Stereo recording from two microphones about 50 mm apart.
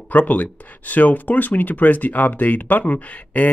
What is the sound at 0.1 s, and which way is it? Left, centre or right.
Speech, left.